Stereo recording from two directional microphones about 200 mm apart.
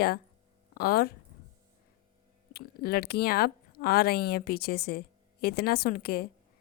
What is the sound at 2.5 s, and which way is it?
Speech, 50° left (ahead or behind).